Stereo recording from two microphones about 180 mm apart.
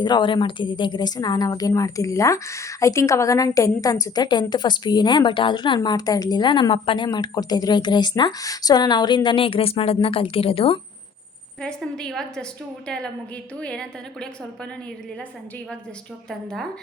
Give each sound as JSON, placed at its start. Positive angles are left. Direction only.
{"t": 0.0, "sound": "a woman's voice", "side_deg": 25}
{"t": 11.6, "sound": "a woman's voice", "side_deg": 5}